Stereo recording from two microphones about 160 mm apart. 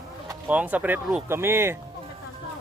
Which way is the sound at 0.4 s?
10° right (ahead or behind).